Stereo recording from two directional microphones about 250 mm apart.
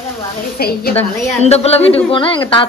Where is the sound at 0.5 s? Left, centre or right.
Left.